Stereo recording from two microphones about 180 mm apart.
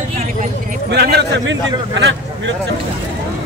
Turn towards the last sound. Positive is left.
turn(degrees=-90)